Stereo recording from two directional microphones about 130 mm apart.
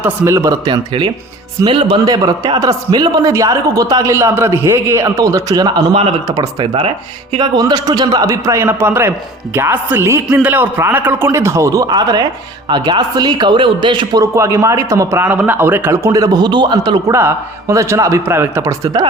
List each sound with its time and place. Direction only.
0.0 s a man's voice: 20° right (ahead or behind)
0.6 s speech: 35° right (ahead or behind)
2.0 s a man's voice: 30° right (ahead or behind)
5.9 s speech: 50° right (ahead or behind)
6.2 s a man's voice: 30° right (ahead or behind)
17.1 s a man's voice: 20° right (ahead or behind)